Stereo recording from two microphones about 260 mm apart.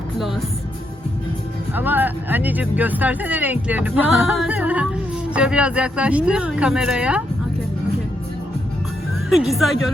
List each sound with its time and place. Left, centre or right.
1.7 s speech: centre
9.3 s speech: centre